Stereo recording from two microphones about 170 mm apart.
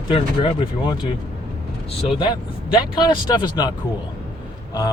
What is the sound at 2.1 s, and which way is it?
Speech, 30° left (ahead or behind).